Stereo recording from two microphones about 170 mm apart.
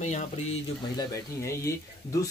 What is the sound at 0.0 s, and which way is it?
Speech, 45° left (ahead or behind).